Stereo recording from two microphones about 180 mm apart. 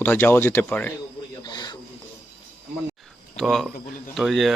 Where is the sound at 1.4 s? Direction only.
25° left (ahead or behind).